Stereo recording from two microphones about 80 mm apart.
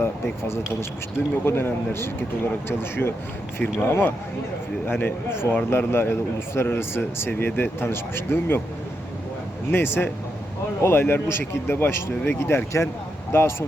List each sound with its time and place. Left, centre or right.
0.0 s a man's voice: left
9.7 s a man's voice: left